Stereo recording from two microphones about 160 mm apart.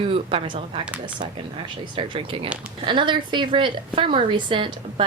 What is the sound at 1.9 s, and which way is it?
A woman's voice, 35° right (ahead or behind).